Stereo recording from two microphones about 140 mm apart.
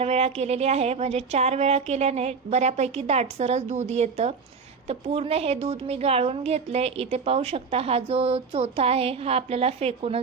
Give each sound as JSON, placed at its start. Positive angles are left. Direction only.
{"t": 0.0, "sound": "a woman's voice", "side_deg": -50}